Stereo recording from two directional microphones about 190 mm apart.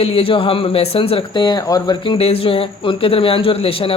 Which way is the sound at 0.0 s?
30° left (ahead or behind).